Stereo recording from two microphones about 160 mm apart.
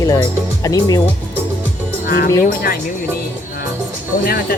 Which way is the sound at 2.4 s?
65° left (ahead or behind).